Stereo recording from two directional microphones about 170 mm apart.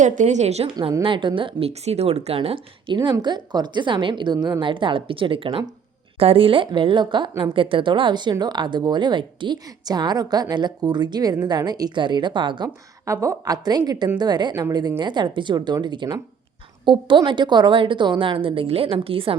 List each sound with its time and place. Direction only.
0.0 s a woman's voice: 45° right (ahead or behind)